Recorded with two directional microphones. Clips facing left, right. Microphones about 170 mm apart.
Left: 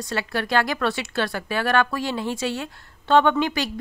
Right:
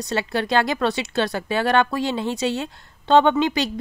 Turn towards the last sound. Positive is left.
turn(degrees=-20)  # may be behind; listen again after turning